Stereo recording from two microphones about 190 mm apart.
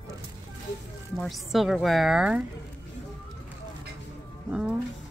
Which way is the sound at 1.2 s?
Centre (ahead or behind).